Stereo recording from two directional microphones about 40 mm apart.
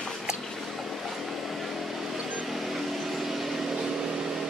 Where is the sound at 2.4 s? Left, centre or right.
Centre.